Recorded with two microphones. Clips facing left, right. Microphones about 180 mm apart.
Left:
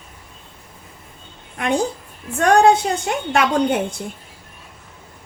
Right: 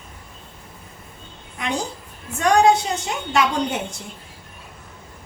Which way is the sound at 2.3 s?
55° left (ahead or behind).